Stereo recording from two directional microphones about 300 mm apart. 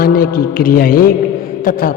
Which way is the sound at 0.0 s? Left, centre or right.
Left.